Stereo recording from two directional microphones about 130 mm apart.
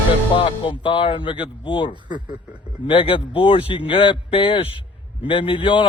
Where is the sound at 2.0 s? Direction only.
35° right (ahead or behind).